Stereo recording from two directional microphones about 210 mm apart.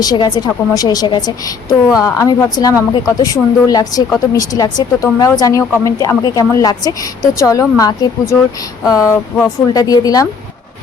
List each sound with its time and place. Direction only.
0.0 s a woman's voice: 20° left (ahead or behind)